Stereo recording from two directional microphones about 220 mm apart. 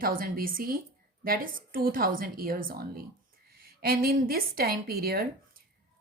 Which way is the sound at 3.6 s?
45° right (ahead or behind).